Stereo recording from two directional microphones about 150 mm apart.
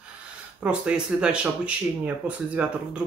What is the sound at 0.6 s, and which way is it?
Speech, 10° right (ahead or behind).